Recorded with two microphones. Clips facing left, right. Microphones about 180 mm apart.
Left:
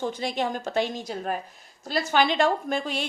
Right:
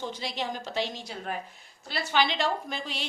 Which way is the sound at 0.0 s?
50° left (ahead or behind).